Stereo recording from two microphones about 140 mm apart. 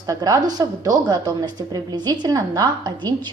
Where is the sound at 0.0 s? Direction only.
25° right (ahead or behind).